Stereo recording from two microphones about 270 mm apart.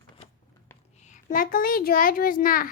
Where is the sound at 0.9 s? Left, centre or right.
Left.